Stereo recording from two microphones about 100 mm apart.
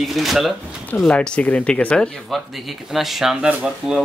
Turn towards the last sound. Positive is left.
turn(degrees=-10)  # may be behind; listen again after turning